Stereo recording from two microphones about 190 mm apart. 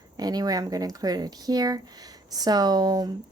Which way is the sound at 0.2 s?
20° right (ahead or behind).